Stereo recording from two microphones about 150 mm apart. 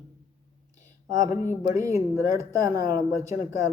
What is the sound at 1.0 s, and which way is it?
Speech, 25° right (ahead or behind).